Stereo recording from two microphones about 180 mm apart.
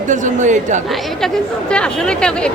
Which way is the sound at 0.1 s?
45° right (ahead or behind).